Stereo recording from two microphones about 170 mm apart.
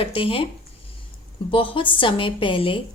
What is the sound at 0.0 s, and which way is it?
Speech, 30° left (ahead or behind).